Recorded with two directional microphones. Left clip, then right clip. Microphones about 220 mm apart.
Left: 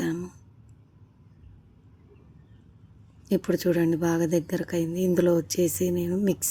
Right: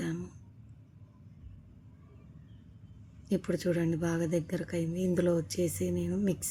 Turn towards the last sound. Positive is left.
turn(degrees=10)  # may be behind; listen again after turning